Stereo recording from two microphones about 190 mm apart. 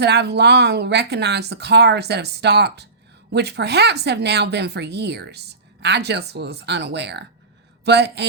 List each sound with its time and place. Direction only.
0.0 s speech: 60° right (ahead or behind)